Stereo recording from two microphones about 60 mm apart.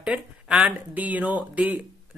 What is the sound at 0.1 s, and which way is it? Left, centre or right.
Speech, right.